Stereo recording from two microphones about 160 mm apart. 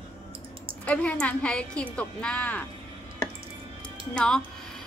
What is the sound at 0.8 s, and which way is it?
Speech, 10° left (ahead or behind).